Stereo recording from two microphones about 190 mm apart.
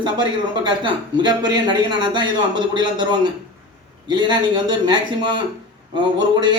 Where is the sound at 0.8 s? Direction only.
25° right (ahead or behind).